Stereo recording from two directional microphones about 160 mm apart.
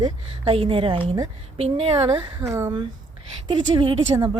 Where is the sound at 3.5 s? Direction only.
30° right (ahead or behind).